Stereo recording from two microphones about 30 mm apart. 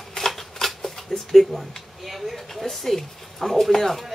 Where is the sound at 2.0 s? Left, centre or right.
Centre.